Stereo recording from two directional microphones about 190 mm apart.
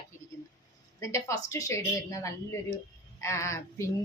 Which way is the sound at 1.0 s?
15° left (ahead or behind).